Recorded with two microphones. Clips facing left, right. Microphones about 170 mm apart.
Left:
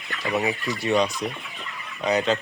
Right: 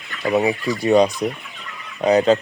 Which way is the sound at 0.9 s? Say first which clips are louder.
Right 7 dB; 40° right (ahead or behind).